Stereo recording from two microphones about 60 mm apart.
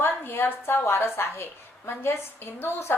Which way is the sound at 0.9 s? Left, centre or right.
Left.